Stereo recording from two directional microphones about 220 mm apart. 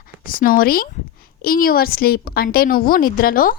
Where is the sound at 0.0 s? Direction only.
40° left (ahead or behind).